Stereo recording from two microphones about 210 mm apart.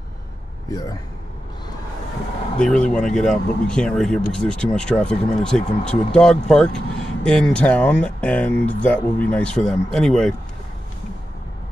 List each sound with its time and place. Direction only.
0.7 s a man's voice: 15° left (ahead or behind)
2.6 s speech: 5° left (ahead or behind)